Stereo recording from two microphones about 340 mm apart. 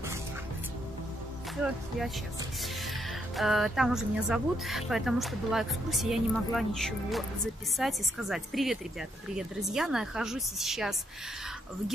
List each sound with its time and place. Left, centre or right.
3.3 s a woman's voice: centre